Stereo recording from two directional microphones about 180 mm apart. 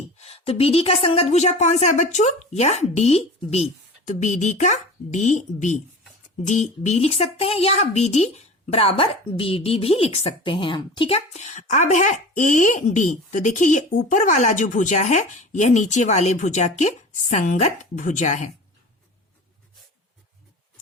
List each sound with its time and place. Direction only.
0.2 s speech: 35° left (ahead or behind)